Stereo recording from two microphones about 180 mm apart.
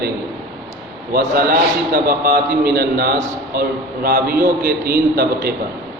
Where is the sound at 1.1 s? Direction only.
55° right (ahead or behind).